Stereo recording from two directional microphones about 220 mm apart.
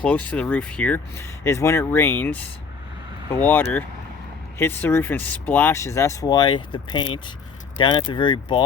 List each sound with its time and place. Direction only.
0.0 s speech: 5° left (ahead or behind)
3.4 s speech: 10° left (ahead or behind)